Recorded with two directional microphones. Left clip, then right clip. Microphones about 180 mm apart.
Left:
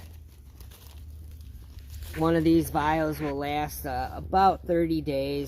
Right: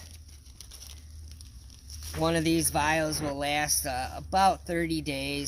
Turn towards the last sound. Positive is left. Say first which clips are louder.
# left 4 dB
turn(degrees=-15)  # may be behind; listen again after turning